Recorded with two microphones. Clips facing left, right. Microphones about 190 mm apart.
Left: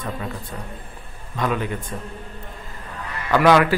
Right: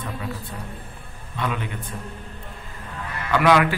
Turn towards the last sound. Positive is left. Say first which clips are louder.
# left 3 dB
turn(degrees=40)  # may be behind; listen again after turning